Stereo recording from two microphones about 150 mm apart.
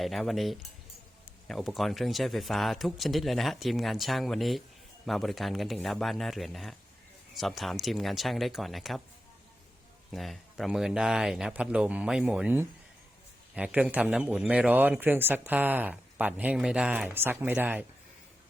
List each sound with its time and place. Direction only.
0.0 s speech: centre (ahead or behind)
10.1 s a man's voice: centre (ahead or behind)